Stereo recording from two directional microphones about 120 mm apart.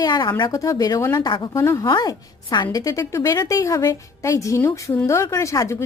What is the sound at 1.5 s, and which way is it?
Speech, 25° left (ahead or behind).